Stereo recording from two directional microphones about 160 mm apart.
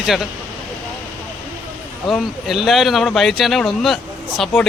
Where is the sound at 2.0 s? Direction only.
Centre (ahead or behind).